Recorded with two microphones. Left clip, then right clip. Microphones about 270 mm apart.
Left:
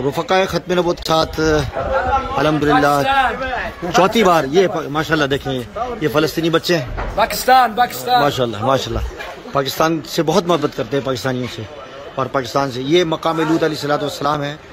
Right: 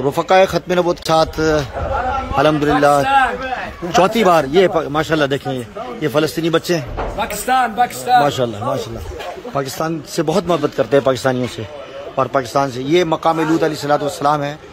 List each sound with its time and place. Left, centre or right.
0.0 s a man's voice: centre